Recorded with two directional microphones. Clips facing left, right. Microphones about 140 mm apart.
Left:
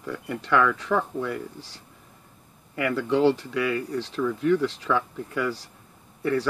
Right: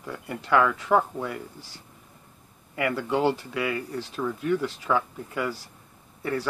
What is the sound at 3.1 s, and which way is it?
Speech, 50° right (ahead or behind).